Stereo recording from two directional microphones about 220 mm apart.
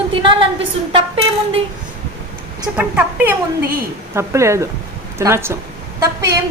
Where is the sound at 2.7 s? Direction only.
5° right (ahead or behind).